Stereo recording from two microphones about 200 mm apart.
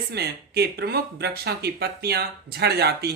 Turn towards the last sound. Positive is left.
turn(degrees=-55)  # may be behind; listen again after turning